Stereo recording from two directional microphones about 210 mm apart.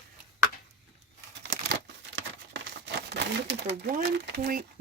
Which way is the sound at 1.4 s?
55° right (ahead or behind).